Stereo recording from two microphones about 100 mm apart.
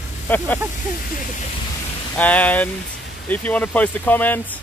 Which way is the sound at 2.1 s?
15° left (ahead or behind).